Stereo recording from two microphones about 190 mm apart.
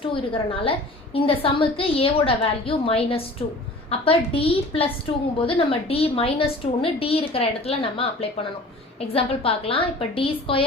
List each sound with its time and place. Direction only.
0.2 s a woman's voice: 30° left (ahead or behind)